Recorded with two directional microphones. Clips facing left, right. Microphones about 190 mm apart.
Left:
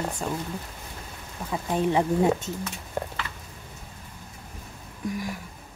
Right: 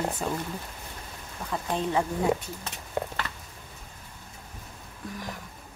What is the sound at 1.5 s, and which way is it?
Speech, 15° left (ahead or behind).